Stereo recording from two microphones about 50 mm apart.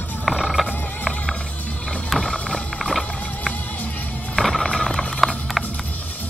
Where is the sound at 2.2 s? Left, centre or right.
Centre.